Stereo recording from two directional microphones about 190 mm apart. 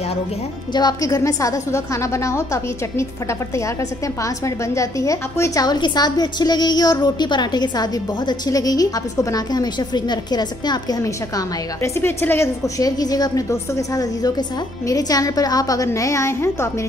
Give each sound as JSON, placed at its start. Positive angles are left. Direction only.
{"t": 0.7, "sound": "a woman's voice", "side_deg": 20}
{"t": 4.7, "sound": "a woman's voice", "side_deg": 15}